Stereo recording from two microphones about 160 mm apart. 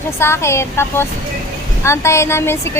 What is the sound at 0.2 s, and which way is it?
Speech, 15° left (ahead or behind).